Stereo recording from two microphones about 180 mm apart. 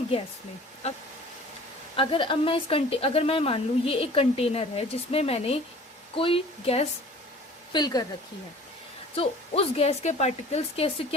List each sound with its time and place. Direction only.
2.0 s a woman's voice: 30° left (ahead or behind)
9.1 s a woman's voice: 35° left (ahead or behind)